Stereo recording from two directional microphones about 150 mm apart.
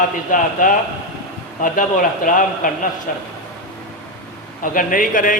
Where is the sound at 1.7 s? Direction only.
65° left (ahead or behind).